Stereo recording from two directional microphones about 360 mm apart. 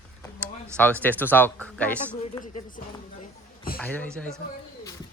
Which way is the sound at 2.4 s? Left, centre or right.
Left.